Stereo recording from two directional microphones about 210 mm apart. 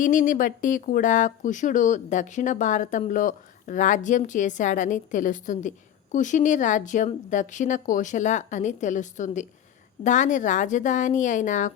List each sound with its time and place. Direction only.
0.0 s speech: 40° left (ahead or behind)